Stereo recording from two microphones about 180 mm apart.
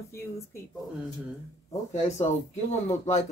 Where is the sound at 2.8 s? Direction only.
40° left (ahead or behind).